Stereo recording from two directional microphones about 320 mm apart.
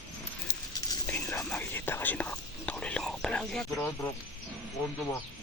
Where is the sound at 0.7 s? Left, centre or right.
Centre.